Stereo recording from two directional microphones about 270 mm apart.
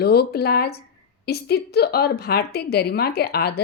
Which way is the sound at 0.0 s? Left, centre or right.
Left.